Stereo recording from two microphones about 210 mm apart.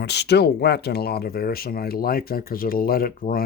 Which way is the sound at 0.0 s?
55° left (ahead or behind).